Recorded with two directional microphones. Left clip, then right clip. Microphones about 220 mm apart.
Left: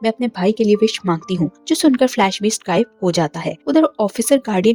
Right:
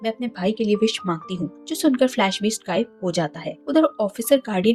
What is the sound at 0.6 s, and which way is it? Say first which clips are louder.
Speech: left 5 dB; 40° left (ahead or behind).